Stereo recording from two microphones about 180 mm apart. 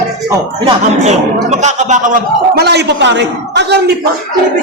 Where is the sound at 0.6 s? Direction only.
40° right (ahead or behind); by 3.8 s 70° right (ahead or behind).